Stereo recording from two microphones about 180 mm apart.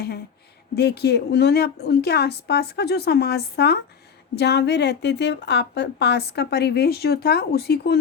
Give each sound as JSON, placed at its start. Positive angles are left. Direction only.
{"t": 0.8, "sound": "a woman's voice", "side_deg": 65}